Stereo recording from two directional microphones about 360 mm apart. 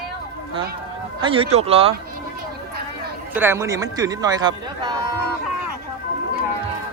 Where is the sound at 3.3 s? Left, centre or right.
Centre.